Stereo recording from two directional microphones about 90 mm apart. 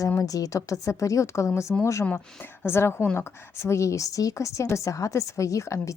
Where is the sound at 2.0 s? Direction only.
20° left (ahead or behind).